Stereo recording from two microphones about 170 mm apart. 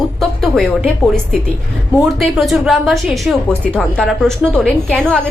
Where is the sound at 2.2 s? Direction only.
Centre (ahead or behind).